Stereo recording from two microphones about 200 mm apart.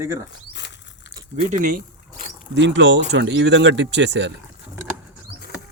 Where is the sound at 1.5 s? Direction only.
40° right (ahead or behind).